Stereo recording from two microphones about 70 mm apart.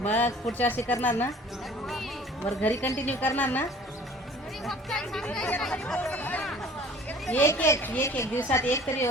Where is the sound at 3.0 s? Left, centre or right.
Left.